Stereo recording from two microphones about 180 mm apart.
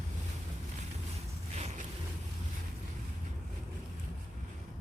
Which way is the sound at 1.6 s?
40° right (ahead or behind).